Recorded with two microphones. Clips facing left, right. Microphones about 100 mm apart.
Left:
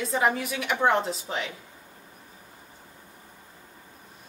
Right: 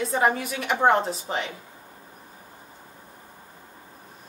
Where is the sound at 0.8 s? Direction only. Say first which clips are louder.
Right 3 dB; 35° right (ahead or behind).